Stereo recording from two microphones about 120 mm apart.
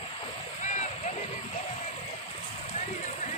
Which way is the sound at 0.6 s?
85° left.